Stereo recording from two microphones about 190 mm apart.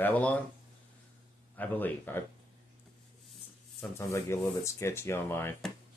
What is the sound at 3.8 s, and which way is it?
Speech, 15° left (ahead or behind).